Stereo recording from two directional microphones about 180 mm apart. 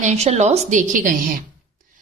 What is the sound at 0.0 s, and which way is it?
Speech, 40° right (ahead or behind).